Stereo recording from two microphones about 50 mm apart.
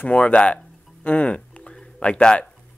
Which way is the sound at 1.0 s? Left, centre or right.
Left.